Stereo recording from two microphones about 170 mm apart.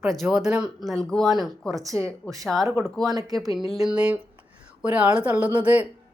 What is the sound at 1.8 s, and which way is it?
Speech, 20° right (ahead or behind).